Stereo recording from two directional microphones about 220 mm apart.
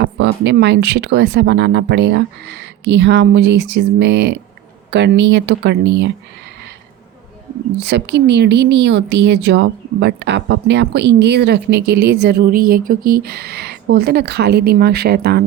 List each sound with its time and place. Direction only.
0.0 s speech: 50° right (ahead or behind)
7.9 s speech: 50° right (ahead or behind)